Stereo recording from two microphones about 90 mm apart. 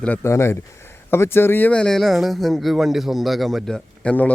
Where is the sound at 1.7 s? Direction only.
10° left (ahead or behind).